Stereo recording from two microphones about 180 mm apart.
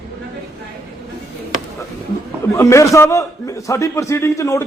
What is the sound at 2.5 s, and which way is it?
A man's voice, 15° left (ahead or behind).